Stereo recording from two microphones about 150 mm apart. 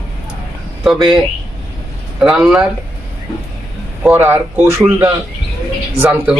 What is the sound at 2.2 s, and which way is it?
Speech, centre (ahead or behind).